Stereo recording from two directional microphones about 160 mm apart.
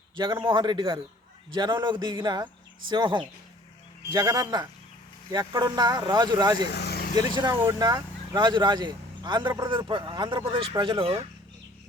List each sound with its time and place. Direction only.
0.2 s a man's voice: 30° right (ahead or behind)
6.7 s vehicle: 90° left
7.6 s speech: 20° right (ahead or behind)